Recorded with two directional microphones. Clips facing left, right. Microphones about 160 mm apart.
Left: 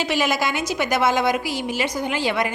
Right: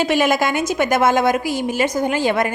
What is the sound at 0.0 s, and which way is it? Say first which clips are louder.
A woman's voice: right 5 dB; 50° right (ahead or behind).